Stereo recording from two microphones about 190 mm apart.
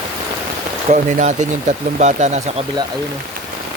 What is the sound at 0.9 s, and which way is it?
Speech, 40° right (ahead or behind).